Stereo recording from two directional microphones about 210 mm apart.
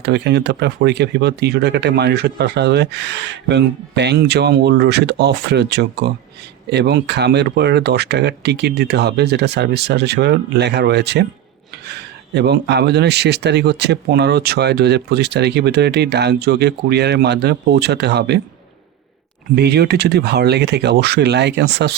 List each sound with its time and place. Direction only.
0.0 s speech: 55° right (ahead or behind)
19.5 s speech: 50° right (ahead or behind)